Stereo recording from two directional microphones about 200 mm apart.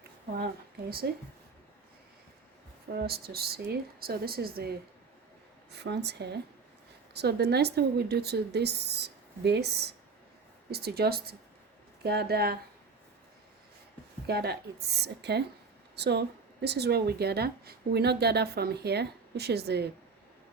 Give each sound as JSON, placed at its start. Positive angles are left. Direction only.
{"t": 0.3, "sound": "speech", "side_deg": -50}
{"t": 2.9, "sound": "speech", "side_deg": -50}
{"t": 5.7, "sound": "a woman's voice", "side_deg": -55}
{"t": 14.3, "sound": "a woman's voice", "side_deg": -55}